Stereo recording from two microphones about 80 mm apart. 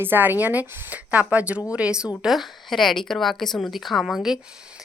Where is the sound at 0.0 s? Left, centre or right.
Right.